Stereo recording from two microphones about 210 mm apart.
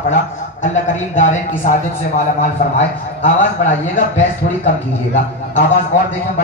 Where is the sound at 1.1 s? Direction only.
35° left (ahead or behind).